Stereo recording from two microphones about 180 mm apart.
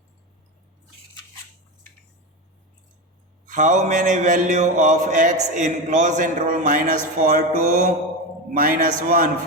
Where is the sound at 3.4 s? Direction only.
45° right (ahead or behind).